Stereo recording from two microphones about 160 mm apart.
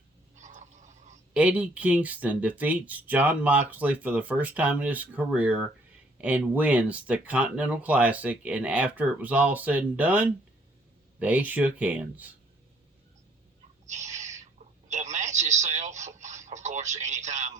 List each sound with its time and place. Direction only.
0.3 s a sound: 50° right (ahead or behind)
1.3 s speech: 10° right (ahead or behind)
13.8 s owl: 45° right (ahead or behind)
14.8 s radio: 45° right (ahead or behind)